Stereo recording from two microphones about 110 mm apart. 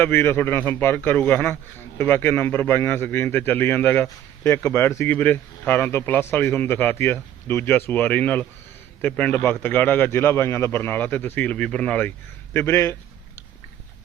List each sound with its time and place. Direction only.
0.0 s a man's voice: 20° left (ahead or behind)
12.5 s a man's voice: 25° left (ahead or behind)